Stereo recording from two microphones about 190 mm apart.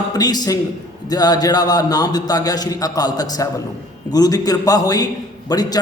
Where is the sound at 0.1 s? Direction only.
20° left (ahead or behind).